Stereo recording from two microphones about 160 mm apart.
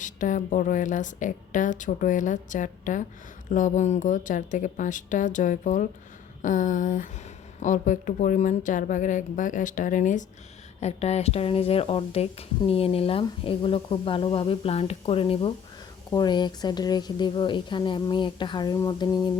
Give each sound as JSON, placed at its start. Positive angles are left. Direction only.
{"t": 0.0, "sound": "a woman's voice", "side_deg": 50}